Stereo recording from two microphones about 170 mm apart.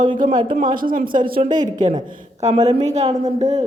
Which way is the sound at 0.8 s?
55° right (ahead or behind).